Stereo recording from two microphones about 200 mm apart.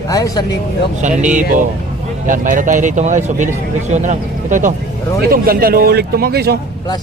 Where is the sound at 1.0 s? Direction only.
40° right (ahead or behind).